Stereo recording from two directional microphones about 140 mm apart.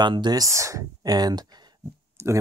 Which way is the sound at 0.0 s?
30° right (ahead or behind).